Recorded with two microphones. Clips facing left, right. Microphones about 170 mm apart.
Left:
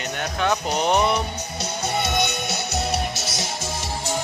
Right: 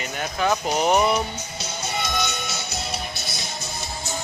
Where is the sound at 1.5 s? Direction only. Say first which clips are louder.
Left 5 dB; 60° left (ahead or behind).